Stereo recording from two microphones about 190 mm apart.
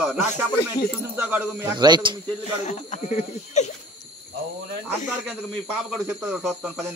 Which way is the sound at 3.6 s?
35° left (ahead or behind).